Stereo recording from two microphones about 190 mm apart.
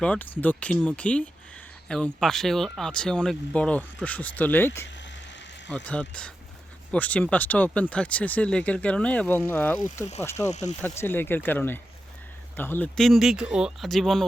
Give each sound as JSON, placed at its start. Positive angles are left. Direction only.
{"t": 0.0, "sound": "speech", "side_deg": 5}
{"t": 4.9, "sound": "vehicle", "side_deg": 70}
{"t": 5.7, "sound": "speech", "side_deg": 5}
{"t": 10.5, "sound": "speech", "side_deg": 40}
{"t": 10.9, "sound": "speech", "side_deg": 10}